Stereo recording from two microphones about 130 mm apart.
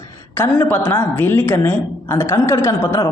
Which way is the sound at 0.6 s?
15° left (ahead or behind).